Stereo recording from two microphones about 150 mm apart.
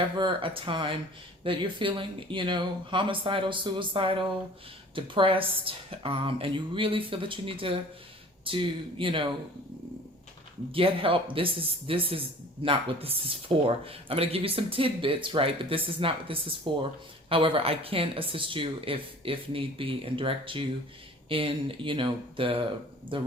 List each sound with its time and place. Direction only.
0.2 s speech: 35° right (ahead or behind)
10.7 s speech: 35° right (ahead or behind)